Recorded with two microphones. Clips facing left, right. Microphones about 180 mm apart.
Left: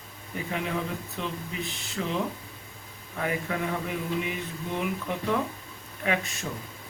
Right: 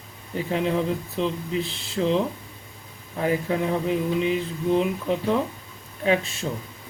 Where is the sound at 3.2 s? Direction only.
30° right (ahead or behind).